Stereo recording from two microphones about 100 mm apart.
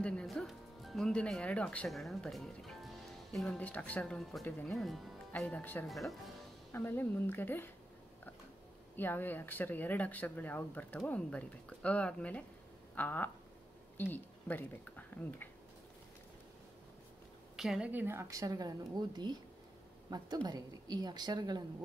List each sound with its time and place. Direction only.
0.0 s music: 10° left (ahead or behind)
1.9 s speech: centre (ahead or behind)
5.3 s speech: 15° left (ahead or behind)
5.9 s speech: centre (ahead or behind)
6.7 s speech: 20° left (ahead or behind)
8.9 s speech: 20° left (ahead or behind)
17.6 s a woman's voice: 5° right (ahead or behind); by 21.6 s 45° right (ahead or behind)